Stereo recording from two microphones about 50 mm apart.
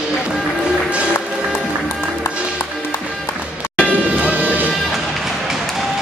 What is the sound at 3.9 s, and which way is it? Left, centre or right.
Music, right.